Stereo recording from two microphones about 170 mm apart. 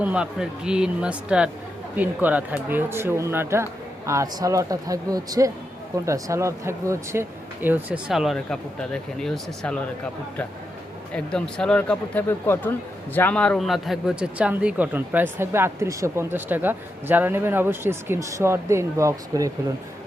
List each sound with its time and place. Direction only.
0.0 s speech: 5° right (ahead or behind)
11.1 s speech: 5° left (ahead or behind); by 19.5 s 20° right (ahead or behind)